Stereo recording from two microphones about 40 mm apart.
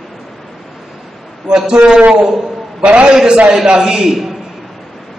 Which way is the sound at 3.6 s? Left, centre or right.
Centre.